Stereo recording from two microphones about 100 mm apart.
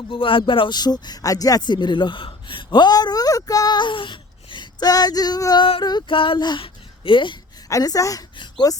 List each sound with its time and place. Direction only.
0.1 s speech: 60° left (ahead or behind)
0.8 s speech: 45° left (ahead or behind); by 2.6 s 60° left (ahead or behind)
2.6 s speech: 45° left (ahead or behind)
6.1 s speech: 55° left (ahead or behind)
7.7 s a woman's voice: 35° left (ahead or behind)